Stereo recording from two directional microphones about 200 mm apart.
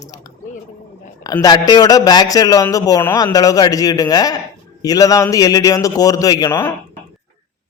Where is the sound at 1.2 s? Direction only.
20° left (ahead or behind).